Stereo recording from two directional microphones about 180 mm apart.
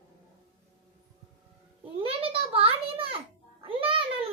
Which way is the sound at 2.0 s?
30° right (ahead or behind).